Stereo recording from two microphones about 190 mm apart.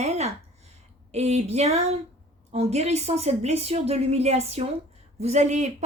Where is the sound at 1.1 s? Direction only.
35° right (ahead or behind).